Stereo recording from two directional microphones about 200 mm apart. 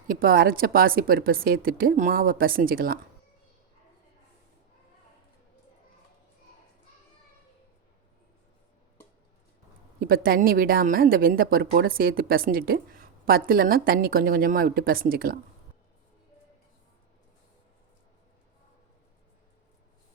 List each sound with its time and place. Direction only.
0.1 s speech: 45° right (ahead or behind)
10.0 s speech: 45° right (ahead or behind)